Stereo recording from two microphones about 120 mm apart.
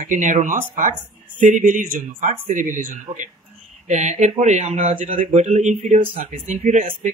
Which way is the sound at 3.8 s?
75° right (ahead or behind).